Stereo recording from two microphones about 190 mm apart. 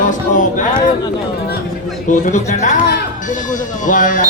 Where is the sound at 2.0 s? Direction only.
45° left (ahead or behind).